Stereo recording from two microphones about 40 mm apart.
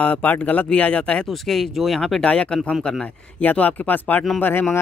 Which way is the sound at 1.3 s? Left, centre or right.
Centre.